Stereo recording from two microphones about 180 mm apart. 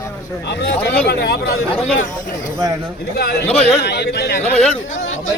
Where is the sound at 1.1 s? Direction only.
60° left (ahead or behind).